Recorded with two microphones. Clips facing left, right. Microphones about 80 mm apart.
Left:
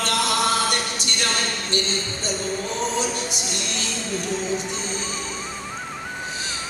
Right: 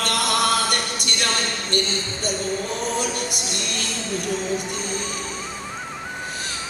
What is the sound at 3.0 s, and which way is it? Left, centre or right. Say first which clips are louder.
A capella: even; right.